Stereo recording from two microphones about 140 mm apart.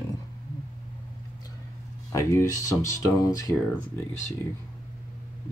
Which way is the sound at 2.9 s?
25° left (ahead or behind).